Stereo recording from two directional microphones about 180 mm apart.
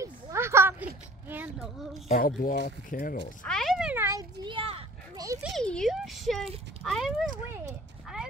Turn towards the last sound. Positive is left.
turn(degrees=0)  # may be behind; listen again after turning